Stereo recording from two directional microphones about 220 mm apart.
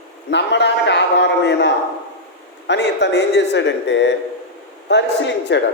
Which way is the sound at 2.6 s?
50° left (ahead or behind).